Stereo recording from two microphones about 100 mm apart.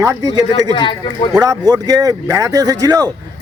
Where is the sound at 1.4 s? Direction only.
40° right (ahead or behind).